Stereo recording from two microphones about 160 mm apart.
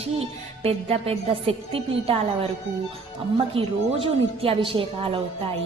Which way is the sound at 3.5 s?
35° right (ahead or behind).